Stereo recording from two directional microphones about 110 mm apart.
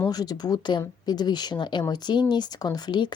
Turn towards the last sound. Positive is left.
turn(degrees=45)  # may be behind; listen again after turning